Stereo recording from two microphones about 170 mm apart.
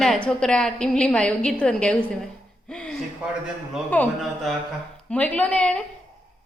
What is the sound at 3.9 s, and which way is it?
A woman's voice, 5° left (ahead or behind).